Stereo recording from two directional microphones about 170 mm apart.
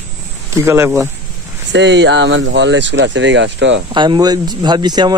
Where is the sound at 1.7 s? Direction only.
90° right.